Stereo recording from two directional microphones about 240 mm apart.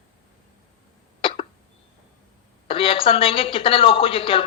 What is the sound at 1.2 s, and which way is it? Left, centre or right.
Cough, left.